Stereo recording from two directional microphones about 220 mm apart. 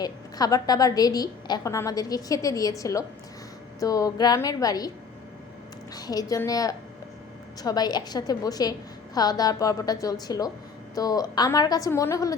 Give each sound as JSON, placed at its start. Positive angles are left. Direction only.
{"t": 0.0, "sound": "a woman's voice", "side_deg": 15}
{"t": 5.9, "sound": "a woman's voice", "side_deg": 15}